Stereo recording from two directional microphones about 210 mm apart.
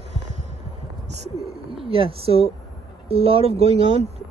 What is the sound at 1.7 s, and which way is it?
Speech, 25° right (ahead or behind).